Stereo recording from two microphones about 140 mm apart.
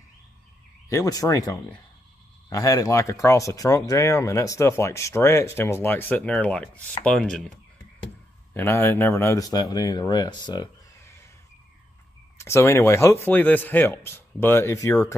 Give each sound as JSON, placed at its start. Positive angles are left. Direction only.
{"t": 0.8, "sound": "speech", "side_deg": 25}
{"t": 8.5, "sound": "speech", "side_deg": 15}
{"t": 10.9, "sound": "a sound", "side_deg": 20}
{"t": 12.4, "sound": "speech", "side_deg": 20}